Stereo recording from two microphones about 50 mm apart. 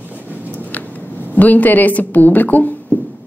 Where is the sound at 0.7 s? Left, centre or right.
Left.